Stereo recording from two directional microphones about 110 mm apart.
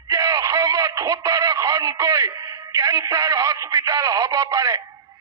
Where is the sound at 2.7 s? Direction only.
30° right (ahead or behind).